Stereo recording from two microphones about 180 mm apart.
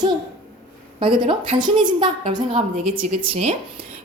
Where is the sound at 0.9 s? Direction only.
25° right (ahead or behind).